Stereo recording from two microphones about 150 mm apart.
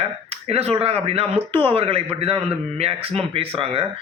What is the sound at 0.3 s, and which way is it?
A man's voice, 45° right (ahead or behind).